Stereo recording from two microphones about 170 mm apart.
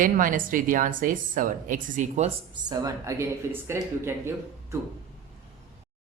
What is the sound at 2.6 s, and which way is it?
Speech, 20° right (ahead or behind).